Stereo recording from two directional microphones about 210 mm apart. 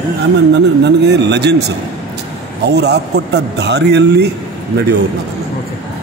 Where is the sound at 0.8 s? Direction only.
55° right (ahead or behind).